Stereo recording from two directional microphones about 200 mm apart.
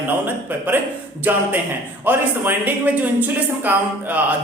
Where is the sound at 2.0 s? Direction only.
10° right (ahead or behind).